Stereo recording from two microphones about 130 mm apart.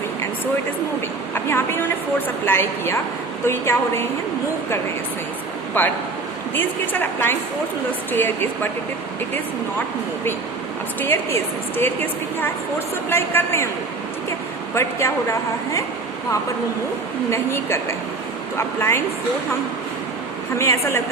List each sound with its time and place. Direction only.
1.3 s a woman's voice: 15° left (ahead or behind)
5.7 s a woman's voice: 15° left (ahead or behind)
11.0 s a woman's voice: 20° left (ahead or behind)
13.1 s a woman's voice: 20° left (ahead or behind)
14.8 s a woman's voice: 20° left (ahead or behind)
17.3 s a woman's voice: 20° left (ahead or behind)
20.6 s a woman's voice: 20° left (ahead or behind)